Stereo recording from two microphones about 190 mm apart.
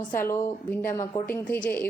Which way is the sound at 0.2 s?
15° left (ahead or behind).